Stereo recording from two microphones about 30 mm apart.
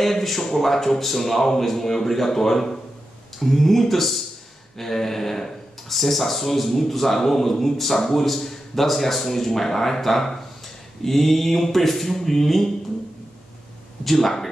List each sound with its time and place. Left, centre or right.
0.0 s speech: centre
0.4 s a man's voice: left
0.7 s speech: centre
14.0 s speech: centre